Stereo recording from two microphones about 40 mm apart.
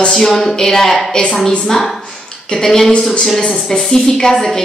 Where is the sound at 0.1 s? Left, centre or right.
Centre.